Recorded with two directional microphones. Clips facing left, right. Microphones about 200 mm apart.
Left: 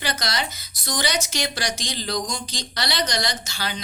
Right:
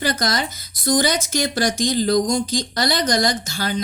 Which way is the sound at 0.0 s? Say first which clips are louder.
Right 6 dB; 50° right (ahead or behind).